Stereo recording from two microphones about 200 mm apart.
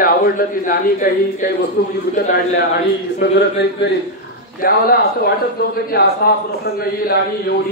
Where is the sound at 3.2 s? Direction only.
60° left (ahead or behind).